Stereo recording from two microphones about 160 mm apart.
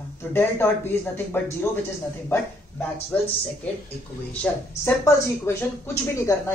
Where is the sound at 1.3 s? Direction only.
10° left (ahead or behind).